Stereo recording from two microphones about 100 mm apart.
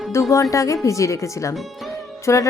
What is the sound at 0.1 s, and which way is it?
A woman's voice, 30° left (ahead or behind).